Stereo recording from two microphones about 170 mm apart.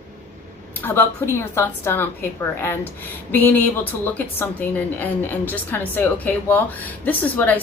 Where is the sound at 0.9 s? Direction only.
15° left (ahead or behind).